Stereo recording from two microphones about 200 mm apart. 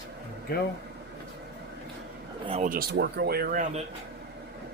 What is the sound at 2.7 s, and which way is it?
Speech, 55° right (ahead or behind).